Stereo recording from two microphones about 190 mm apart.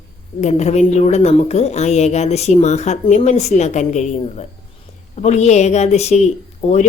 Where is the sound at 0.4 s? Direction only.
35° left (ahead or behind).